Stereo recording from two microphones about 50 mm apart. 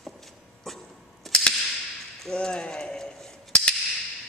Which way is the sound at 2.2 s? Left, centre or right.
Centre.